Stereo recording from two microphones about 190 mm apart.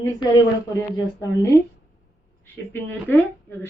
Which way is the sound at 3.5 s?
15° left (ahead or behind).